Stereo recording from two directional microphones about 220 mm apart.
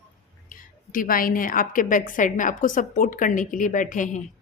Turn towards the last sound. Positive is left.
turn(degrees=35)  # may be behind; listen again after turning